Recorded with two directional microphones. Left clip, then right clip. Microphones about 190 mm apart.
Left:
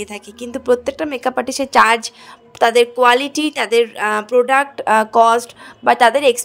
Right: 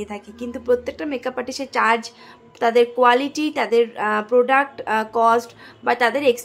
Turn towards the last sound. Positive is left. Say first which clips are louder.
# left 6 dB
turn(degrees=35)  # may be behind; listen again after turning